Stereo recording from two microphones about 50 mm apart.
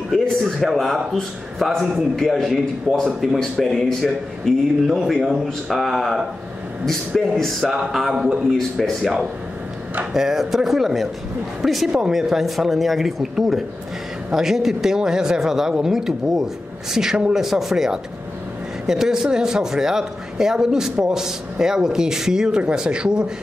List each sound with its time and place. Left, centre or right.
0.1 s a man's voice: centre
3.1 s a man's voice: centre
3.3 s speech: centre
8.1 s a man's voice: centre
8.5 s a man's voice: centre